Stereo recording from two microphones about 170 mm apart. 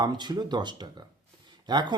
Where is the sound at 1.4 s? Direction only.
25° right (ahead or behind).